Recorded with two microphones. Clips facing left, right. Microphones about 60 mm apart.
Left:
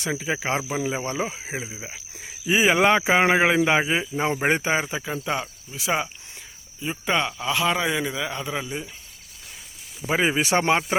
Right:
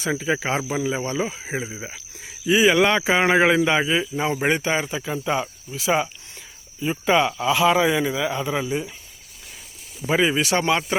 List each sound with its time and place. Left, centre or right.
0.0 s a man's voice: centre
0.7 s speech: centre
2.5 s a man's voice: centre
10.2 s speech: left